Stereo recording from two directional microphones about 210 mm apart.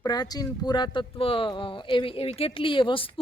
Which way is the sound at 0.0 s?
20° left (ahead or behind).